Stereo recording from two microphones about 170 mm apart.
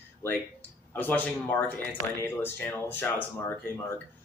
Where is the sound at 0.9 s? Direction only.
10° left (ahead or behind).